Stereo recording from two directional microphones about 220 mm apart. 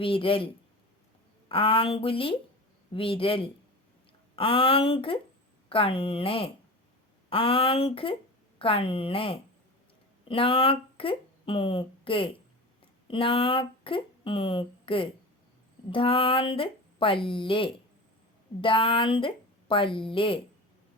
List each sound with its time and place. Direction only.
0.0 s speech: 25° left (ahead or behind)